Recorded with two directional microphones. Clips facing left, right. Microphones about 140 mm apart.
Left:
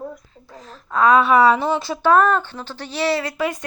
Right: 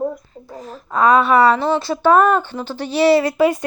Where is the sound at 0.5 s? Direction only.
10° right (ahead or behind); by 1.8 s 10° left (ahead or behind).